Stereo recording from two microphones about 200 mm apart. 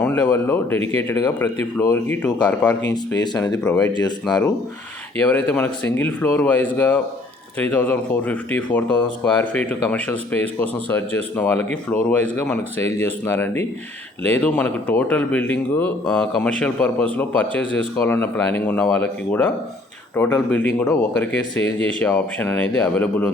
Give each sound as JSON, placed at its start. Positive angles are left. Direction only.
{"t": 0.0, "sound": "speech", "side_deg": 10}
{"t": 2.2, "sound": "speech", "side_deg": 5}
{"t": 2.9, "sound": "speech", "side_deg": 20}
{"t": 3.6, "sound": "speech", "side_deg": 5}
{"t": 3.9, "sound": "speech", "side_deg": 20}
{"t": 5.2, "sound": "a man's voice", "side_deg": 5}
{"t": 13.2, "sound": "a man's voice", "side_deg": 10}